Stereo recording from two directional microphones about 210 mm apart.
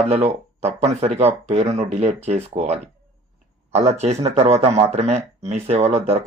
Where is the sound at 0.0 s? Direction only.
30° right (ahead or behind).